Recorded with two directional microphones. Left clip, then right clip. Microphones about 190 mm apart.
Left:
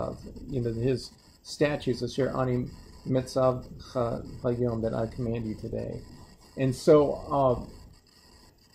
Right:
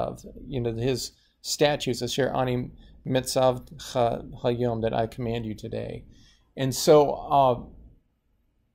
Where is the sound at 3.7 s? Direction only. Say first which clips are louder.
Right 5 dB; 45° right (ahead or behind).